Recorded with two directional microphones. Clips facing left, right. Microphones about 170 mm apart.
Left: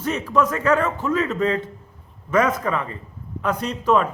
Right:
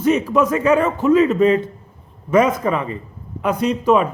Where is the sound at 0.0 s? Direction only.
15° right (ahead or behind).